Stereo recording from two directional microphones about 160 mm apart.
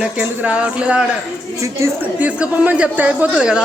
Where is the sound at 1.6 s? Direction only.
20° right (ahead or behind).